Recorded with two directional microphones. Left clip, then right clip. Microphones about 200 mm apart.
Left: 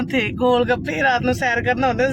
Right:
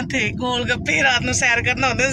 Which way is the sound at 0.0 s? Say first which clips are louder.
Left 3 dB; 40° left (ahead or behind).